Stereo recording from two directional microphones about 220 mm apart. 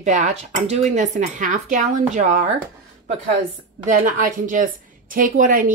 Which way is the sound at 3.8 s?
35° right (ahead or behind).